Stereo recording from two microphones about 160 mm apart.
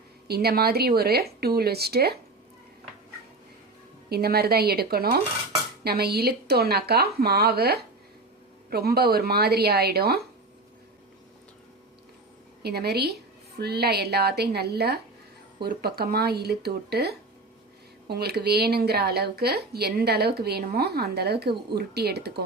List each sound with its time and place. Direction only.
0.3 s speech: 75° right (ahead or behind)
4.1 s speech: 75° right (ahead or behind)
12.6 s speech: 85° right
15.6 s speech: 75° right (ahead or behind)